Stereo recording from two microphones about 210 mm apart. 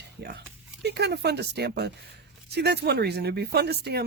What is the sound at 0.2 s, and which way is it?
Speech, 50° right (ahead or behind).